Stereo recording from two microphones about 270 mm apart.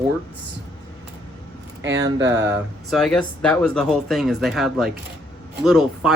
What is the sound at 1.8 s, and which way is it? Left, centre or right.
Speech, right.